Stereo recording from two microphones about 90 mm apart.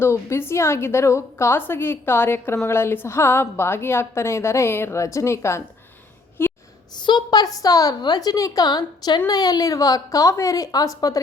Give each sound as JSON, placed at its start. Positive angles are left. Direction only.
{"t": 0.0, "sound": "a woman's voice", "side_deg": 30}
{"t": 6.4, "sound": "a sound", "side_deg": 25}
{"t": 6.9, "sound": "a woman's voice", "side_deg": 55}